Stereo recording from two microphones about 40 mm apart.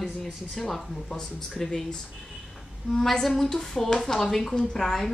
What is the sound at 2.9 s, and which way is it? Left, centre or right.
Speech, centre.